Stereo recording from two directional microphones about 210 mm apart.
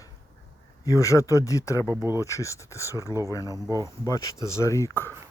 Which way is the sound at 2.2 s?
15° left (ahead or behind).